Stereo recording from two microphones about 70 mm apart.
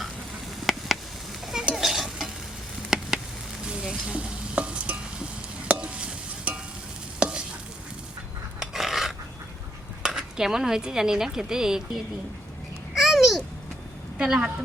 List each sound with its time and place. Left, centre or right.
0.6 s a sound: centre
1.7 s stir: centre
2.9 s a sound: centre
3.7 s stir: centre
8.5 s filing: centre
10.0 s speech: centre
12.9 s babbling: centre
14.2 s speech: centre